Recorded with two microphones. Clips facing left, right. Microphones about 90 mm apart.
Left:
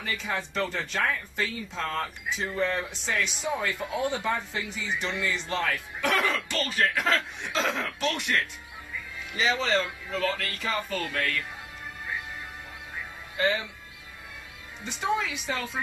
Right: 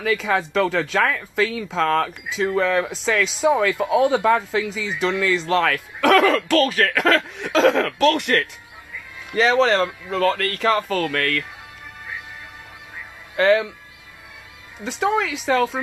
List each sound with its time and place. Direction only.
0.0 s speech: 90° right; by 8.5 s 75° right (ahead or behind)
9.3 s speech: 60° right (ahead or behind)
13.4 s speech: 75° right (ahead or behind)
14.8 s speech: 90° right